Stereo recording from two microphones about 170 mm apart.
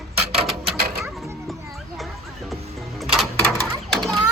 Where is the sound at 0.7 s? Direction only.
65° right (ahead or behind).